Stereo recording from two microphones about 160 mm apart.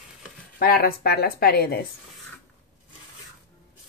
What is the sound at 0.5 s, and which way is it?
Speech, 70° left (ahead or behind).